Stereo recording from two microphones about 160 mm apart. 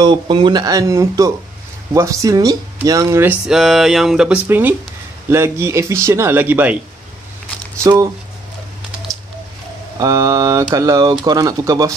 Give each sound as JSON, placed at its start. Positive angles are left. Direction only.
{"t": 0.0, "sound": "speech", "side_deg": -30}
{"t": 3.4, "sound": "speech", "side_deg": 0}
{"t": 7.8, "sound": "speech", "side_deg": -20}
{"t": 9.9, "sound": "speech", "side_deg": -20}